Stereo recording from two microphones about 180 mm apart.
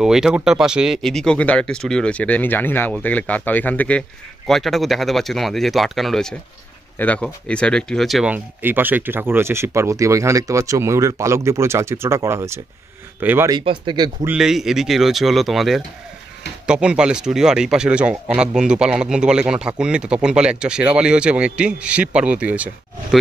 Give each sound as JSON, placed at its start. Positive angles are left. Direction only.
{"t": 0.0, "sound": "speech", "side_deg": -5}
{"t": 13.5, "sound": "speech", "side_deg": -25}
{"t": 14.2, "sound": "speech", "side_deg": -5}